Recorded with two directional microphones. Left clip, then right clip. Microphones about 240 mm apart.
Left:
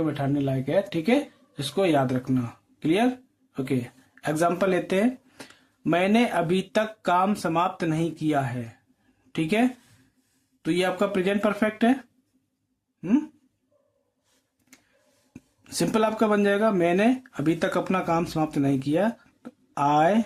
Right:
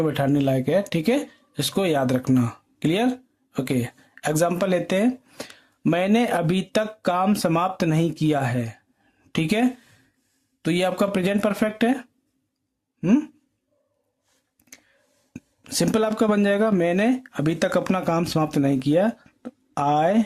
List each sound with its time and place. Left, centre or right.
0.0 s speech: right
13.0 s speech: right
15.3 s speech: right